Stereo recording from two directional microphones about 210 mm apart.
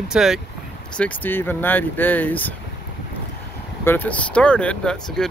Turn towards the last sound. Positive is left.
turn(degrees=5)  # may be behind; listen again after turning